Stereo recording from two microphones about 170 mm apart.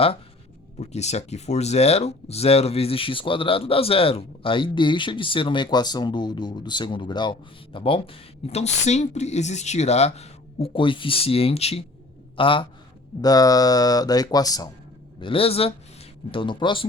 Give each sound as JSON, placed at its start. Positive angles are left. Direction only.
{"t": 0.8, "sound": "speech", "side_deg": 40}
{"t": 15.2, "sound": "speech", "side_deg": 30}